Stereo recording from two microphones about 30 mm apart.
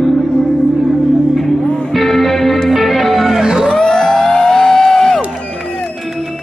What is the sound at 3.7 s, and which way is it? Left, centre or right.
Music, left.